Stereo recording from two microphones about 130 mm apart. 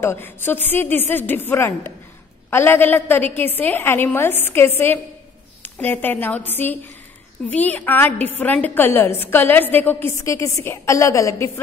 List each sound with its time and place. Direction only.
0.0 s a woman's voice: 20° left (ahead or behind)